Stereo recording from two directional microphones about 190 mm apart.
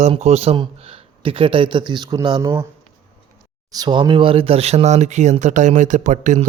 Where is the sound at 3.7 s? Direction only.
20° right (ahead or behind).